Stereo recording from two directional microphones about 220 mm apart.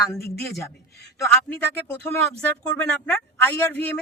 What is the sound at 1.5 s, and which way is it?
Speech, 50° left (ahead or behind).